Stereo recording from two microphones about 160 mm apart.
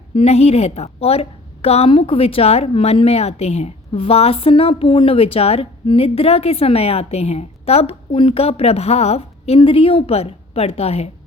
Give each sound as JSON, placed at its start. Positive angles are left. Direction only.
{"t": 0.2, "sound": "a woman's voice", "side_deg": 40}